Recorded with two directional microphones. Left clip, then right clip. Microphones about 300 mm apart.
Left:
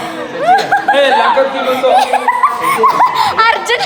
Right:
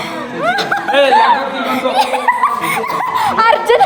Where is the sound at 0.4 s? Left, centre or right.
Centre.